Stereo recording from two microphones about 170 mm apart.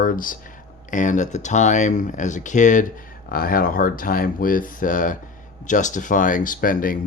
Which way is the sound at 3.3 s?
60° left (ahead or behind).